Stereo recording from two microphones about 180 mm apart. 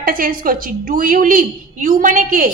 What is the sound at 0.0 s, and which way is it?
A woman's voice, 50° right (ahead or behind).